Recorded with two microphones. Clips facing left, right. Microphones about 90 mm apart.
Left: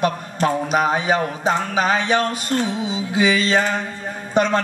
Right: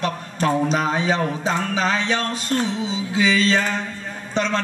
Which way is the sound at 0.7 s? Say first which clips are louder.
Left 2 dB; 15° left (ahead or behind).